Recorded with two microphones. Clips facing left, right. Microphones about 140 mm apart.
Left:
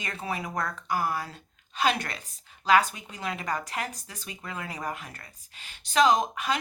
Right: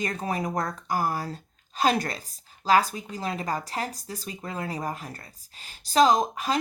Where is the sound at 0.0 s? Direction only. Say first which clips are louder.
Right 5 dB; 40° right (ahead or behind).